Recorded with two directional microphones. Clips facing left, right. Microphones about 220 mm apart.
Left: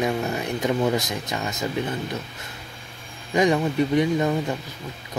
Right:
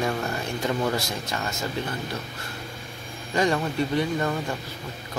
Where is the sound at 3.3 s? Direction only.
15° left (ahead or behind).